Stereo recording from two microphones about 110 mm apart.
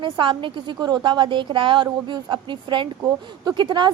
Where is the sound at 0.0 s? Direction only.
50° right (ahead or behind).